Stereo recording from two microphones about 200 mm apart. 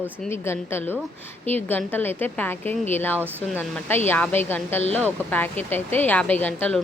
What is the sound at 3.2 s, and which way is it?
Speech, 10° right (ahead or behind).